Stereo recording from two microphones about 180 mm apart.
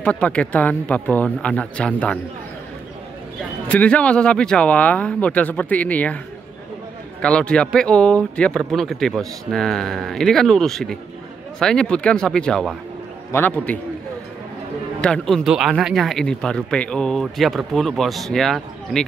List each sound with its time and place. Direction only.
0.0 s speech: 5° left (ahead or behind)
3.6 s speech: 5° left (ahead or behind)
7.2 s speech: 5° left (ahead or behind)
15.0 s speech: 5° left (ahead or behind)